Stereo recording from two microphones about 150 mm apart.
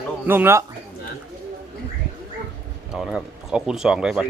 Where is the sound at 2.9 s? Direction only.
Centre (ahead or behind).